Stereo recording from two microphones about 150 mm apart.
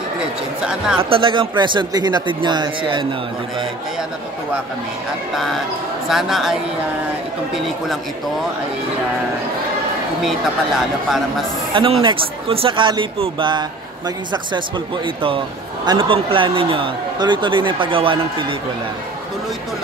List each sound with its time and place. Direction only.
0.6 s speech: 5° right (ahead or behind)
0.9 s speech: 35° right (ahead or behind)
5.3 s speech: centre (ahead or behind)
7.5 s speech: centre (ahead or behind)
11.7 s speech: 35° right (ahead or behind)